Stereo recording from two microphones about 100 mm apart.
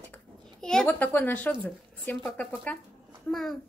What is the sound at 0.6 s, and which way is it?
Speech, 5° left (ahead or behind).